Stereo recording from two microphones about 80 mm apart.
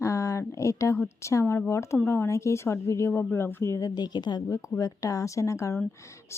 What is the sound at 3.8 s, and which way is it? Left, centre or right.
Speech, left.